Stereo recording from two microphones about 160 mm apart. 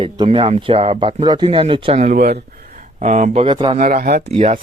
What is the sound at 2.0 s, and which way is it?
Speech, 55° right (ahead or behind).